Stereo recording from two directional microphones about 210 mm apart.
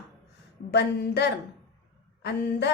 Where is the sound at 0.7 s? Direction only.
55° left (ahead or behind).